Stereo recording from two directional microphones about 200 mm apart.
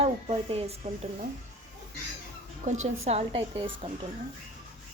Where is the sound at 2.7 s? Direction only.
35° right (ahead or behind).